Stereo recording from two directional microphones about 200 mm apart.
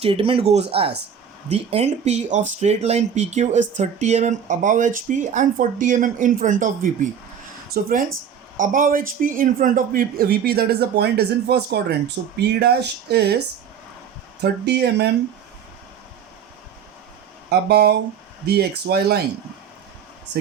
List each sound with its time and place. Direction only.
0.0 s a man's voice: 30° right (ahead or behind); by 13.3 s 55° right (ahead or behind)
14.4 s speech: 55° right (ahead or behind)
17.5 s a man's voice: 55° right (ahead or behind)